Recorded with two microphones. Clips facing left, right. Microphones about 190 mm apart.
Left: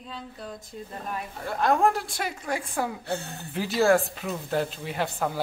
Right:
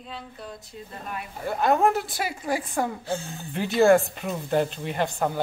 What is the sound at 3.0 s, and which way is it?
Speech, 65° left (ahead or behind).